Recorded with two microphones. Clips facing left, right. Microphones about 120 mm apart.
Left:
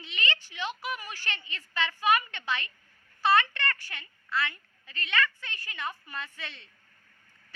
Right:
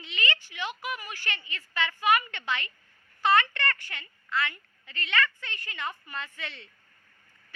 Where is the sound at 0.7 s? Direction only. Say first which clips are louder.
Even; 15° right (ahead or behind).